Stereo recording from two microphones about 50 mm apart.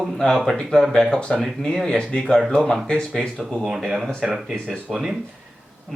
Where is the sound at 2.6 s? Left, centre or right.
Centre.